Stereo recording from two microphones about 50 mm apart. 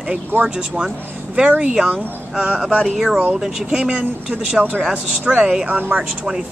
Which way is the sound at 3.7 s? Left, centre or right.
Centre.